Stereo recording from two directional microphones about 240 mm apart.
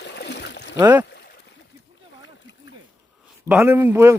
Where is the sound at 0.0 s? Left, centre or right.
Left.